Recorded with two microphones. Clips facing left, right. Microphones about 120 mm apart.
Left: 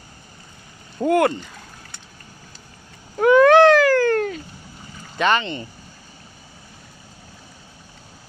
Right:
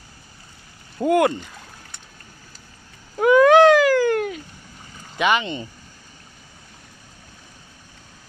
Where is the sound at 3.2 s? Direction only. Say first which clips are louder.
Left 1 dB; 10° right (ahead or behind).